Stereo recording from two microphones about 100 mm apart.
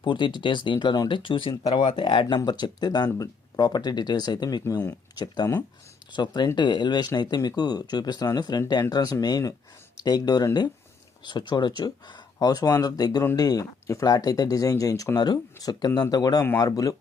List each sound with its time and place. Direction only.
0.0 s speech: 50° left (ahead or behind)
2.4 s speech: 45° left (ahead or behind)